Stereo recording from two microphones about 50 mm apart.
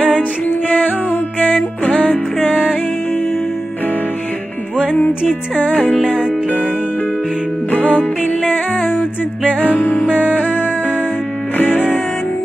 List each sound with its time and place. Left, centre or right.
0.2 s music: left
7.7 s music: left
9.8 s music: left
10.0 s music: right
11.5 s music: left